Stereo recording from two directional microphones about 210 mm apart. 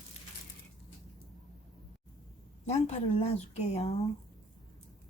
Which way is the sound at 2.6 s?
30° left (ahead or behind).